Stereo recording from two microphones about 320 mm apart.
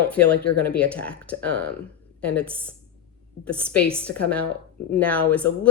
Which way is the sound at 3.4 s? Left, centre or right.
Centre.